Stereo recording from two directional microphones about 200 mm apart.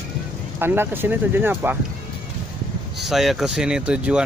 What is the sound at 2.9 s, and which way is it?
Speech, centre (ahead or behind).